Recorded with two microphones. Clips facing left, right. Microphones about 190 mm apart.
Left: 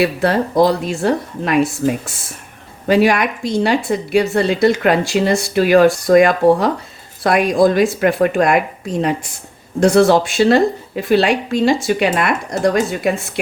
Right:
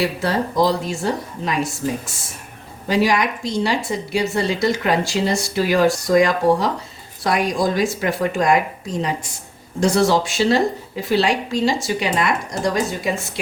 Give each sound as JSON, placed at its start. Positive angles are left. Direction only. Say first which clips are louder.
{"t": 0.0, "sound": "a woman's voice", "louder": "left 5 dB", "side_deg": 60}